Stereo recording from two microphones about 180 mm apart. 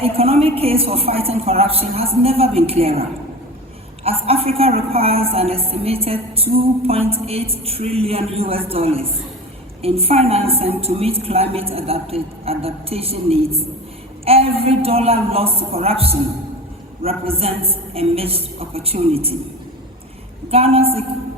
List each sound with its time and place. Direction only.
0.0 s a woman's voice: 35° right (ahead or behind)
4.0 s a woman's voice: 35° right (ahead or behind)
20.5 s a woman's voice: 35° right (ahead or behind)